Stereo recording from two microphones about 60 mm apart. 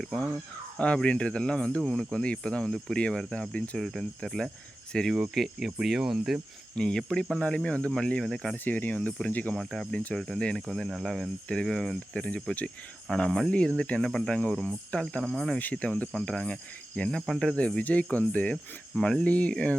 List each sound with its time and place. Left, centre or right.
0.0 s speech: centre
5.3 s speech: centre
6.7 s speech: centre
8.5 s speech: left
9.0 s speech: centre
9.6 s speech: centre
9.9 s speech: left
10.2 s speech: centre
11.0 s speech: centre
11.4 s speech: centre
15.2 s speech: centre
15.5 s speech: left
17.2 s speech: centre
17.4 s speech: centre